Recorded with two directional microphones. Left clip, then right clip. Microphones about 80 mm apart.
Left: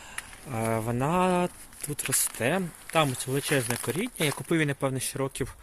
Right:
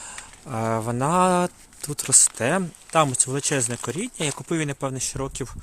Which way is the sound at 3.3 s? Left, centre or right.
Right.